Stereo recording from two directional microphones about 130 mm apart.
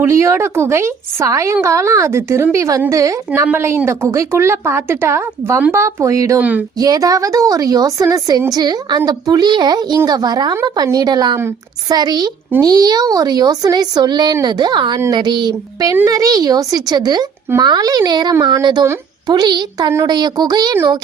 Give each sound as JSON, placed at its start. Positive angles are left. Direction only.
{"t": 0.0, "sound": "a woman's voice", "side_deg": -20}
{"t": 6.4, "sound": "speech", "side_deg": -10}
{"t": 6.7, "sound": "a woman's voice", "side_deg": -30}
{"t": 11.3, "sound": "a woman's voice", "side_deg": -20}
{"t": 11.9, "sound": "a woman's voice", "side_deg": -30}